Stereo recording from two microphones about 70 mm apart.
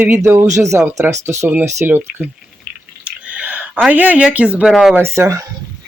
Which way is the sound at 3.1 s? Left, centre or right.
Centre.